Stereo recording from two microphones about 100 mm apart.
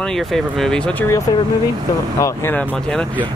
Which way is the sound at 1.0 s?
30° left (ahead or behind).